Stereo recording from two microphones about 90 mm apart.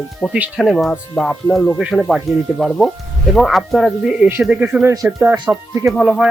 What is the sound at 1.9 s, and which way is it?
Speech, centre (ahead or behind).